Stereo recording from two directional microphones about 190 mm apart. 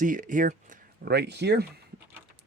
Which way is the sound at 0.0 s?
45° right (ahead or behind).